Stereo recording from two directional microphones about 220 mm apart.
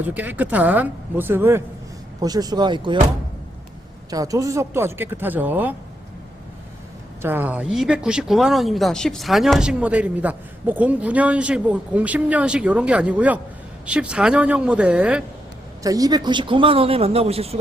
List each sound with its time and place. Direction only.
0.0 s a man's voice: 10° right (ahead or behind)
4.1 s speech: 15° right (ahead or behind)
7.2 s speech: 10° right (ahead or behind)
15.8 s a man's voice: 15° right (ahead or behind)